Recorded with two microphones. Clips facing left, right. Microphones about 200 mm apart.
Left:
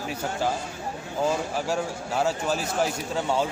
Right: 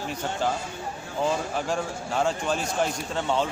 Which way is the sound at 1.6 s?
5° left (ahead or behind).